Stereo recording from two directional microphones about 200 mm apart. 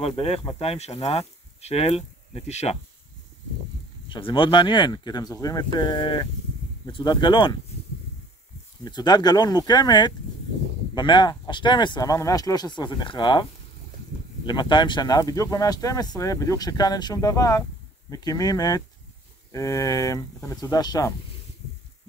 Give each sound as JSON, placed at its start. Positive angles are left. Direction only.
{"t": 0.0, "sound": "speech", "side_deg": 30}
{"t": 4.1, "sound": "speech", "side_deg": 25}
{"t": 8.8, "sound": "speech", "side_deg": 20}